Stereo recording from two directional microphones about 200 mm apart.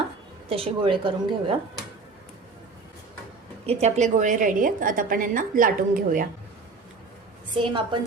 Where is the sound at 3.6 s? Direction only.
35° right (ahead or behind).